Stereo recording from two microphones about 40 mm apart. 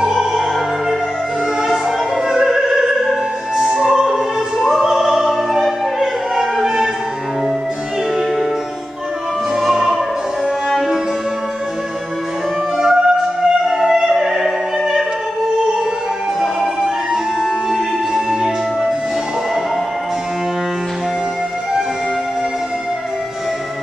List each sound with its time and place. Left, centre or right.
0.0 s opera: centre
2.2 s opera: centre
9.6 s music: centre
12.7 s music: centre
13.7 s opera: centre
17.1 s music: centre